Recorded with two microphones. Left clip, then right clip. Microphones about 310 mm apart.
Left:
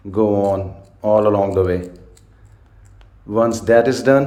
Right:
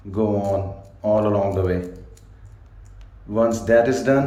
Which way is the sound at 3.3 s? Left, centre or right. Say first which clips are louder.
Left 3 dB; centre.